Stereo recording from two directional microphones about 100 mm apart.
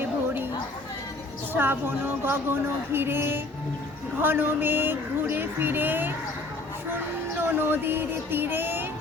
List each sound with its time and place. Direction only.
1.5 s speech: 20° right (ahead or behind)
7.4 s speech: 20° right (ahead or behind)